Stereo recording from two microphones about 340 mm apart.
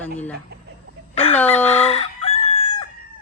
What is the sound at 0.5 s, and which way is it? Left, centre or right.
Chicken, right.